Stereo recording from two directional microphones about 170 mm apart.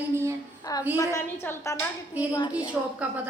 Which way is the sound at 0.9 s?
15° left (ahead or behind).